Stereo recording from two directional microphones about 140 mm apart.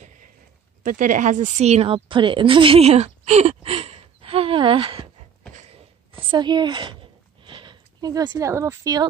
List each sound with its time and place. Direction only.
0.8 s speech: 70° right (ahead or behind); by 5.1 s 40° right (ahead or behind)
6.1 s a woman's voice: 30° right (ahead or behind)
7.4 s a sound: 35° right (ahead or behind)
8.5 s speech: 20° right (ahead or behind)